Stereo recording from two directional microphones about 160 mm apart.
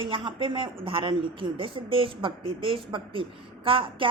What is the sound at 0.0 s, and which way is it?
A man's voice, 30° right (ahead or behind).